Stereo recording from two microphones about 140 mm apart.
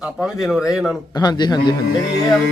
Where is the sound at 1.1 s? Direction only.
30° left (ahead or behind).